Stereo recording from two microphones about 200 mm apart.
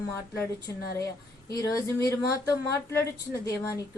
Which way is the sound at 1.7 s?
15° left (ahead or behind).